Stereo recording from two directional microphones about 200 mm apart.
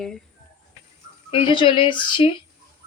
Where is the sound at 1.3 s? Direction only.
25° left (ahead or behind).